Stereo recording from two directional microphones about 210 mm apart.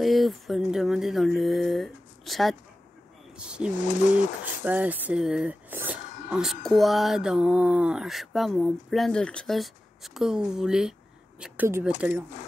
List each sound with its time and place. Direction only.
0.0 s speech: centre (ahead or behind)
3.8 s speech: 35° left (ahead or behind)
4.6 s speech: 5° right (ahead or behind)